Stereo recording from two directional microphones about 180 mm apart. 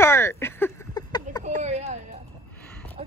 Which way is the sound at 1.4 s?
40° right (ahead or behind).